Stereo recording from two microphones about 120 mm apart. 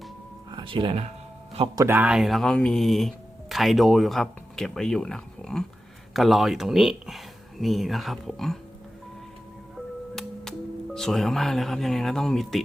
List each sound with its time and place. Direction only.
0.5 s speech: 45° right (ahead or behind)
1.9 s speech: 15° right (ahead or behind)
2.1 s speech: centre (ahead or behind)
10.2 s music: 5° left (ahead or behind)
10.9 s speech: 5° left (ahead or behind)